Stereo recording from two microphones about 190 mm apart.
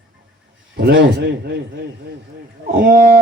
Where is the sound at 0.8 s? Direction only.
60° right (ahead or behind).